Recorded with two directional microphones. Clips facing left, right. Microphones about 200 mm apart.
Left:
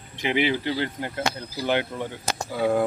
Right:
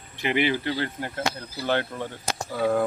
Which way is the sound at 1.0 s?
20° left (ahead or behind).